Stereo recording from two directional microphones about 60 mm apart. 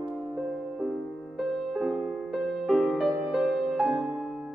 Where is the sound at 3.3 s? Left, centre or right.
Centre.